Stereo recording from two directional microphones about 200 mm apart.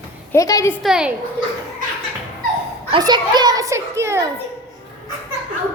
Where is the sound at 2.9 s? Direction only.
20° right (ahead or behind).